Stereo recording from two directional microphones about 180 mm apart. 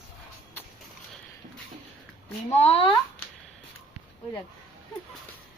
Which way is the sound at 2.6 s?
35° left (ahead or behind).